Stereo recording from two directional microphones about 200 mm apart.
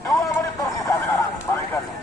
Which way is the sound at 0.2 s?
15° left (ahead or behind).